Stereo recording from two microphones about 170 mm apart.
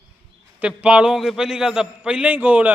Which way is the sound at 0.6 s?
5° right (ahead or behind).